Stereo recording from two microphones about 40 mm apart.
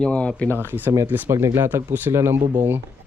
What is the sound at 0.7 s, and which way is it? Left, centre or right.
Speech, right.